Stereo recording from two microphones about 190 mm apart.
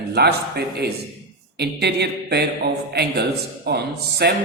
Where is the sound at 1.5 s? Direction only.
60° right (ahead or behind).